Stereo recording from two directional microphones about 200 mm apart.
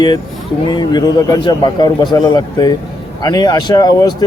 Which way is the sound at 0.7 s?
20° left (ahead or behind).